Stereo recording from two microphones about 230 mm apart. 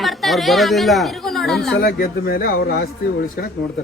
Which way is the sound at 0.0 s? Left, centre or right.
Centre.